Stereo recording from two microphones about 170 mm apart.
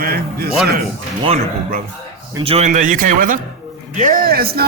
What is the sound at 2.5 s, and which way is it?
A man's voice, 45° right (ahead or behind).